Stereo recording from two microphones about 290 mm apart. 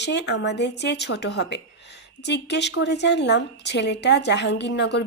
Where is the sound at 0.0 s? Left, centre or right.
Left.